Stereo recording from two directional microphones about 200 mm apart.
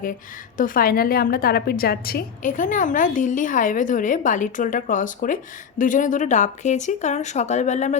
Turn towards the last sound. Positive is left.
turn(degrees=35)  # may be behind; listen again after turning